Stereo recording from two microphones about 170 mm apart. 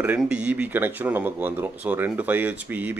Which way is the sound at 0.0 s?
10° right (ahead or behind).